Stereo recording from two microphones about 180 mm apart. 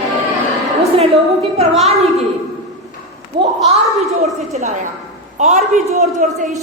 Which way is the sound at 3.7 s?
35° right (ahead or behind).